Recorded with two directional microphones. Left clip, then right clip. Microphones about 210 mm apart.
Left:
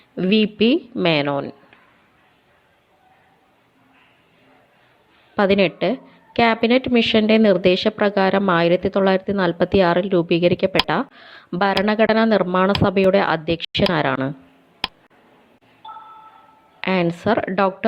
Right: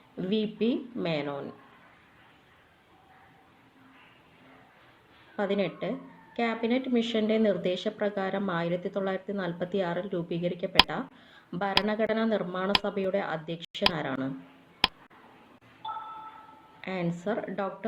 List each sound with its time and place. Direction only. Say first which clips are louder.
0.2 s a woman's voice: left 12 dB; 35° left (ahead or behind)
5.4 s a woman's voice: left 13 dB; 40° left (ahead or behind)
14.8 s a sound: even; centre (ahead or behind)
16.8 s a woman's voice: left 13 dB; 40° left (ahead or behind)